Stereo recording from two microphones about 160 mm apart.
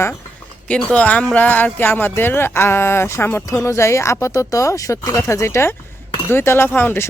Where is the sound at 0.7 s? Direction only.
10° left (ahead or behind).